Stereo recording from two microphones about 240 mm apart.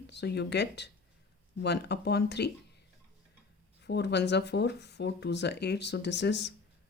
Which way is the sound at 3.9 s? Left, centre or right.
Left.